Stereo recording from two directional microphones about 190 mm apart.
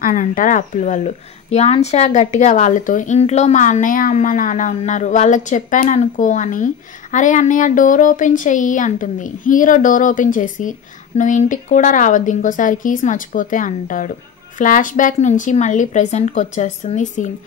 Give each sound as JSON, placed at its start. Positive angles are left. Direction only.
{"t": 0.0, "sound": "a woman's voice", "side_deg": 45}